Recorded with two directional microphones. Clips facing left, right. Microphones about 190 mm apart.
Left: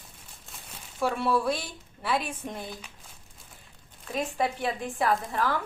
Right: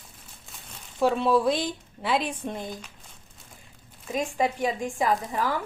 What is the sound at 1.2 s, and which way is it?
Speech, 20° right (ahead or behind).